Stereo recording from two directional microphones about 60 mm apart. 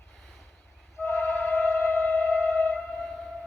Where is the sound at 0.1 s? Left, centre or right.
Centre.